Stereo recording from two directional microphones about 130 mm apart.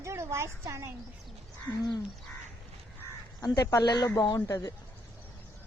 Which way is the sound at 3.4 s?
30° left (ahead or behind).